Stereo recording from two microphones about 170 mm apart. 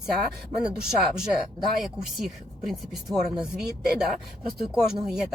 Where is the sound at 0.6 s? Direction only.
5° right (ahead or behind).